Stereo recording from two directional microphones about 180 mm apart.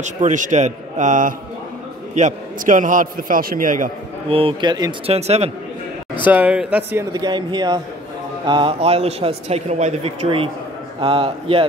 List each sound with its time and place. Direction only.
0.0 s a man's voice: 45° right (ahead or behind)
4.3 s speech: 30° right (ahead or behind)
5.1 s a man's voice: 35° right (ahead or behind)
6.2 s speech: 10° right (ahead or behind)
7.1 s a man's voice: 20° right (ahead or behind)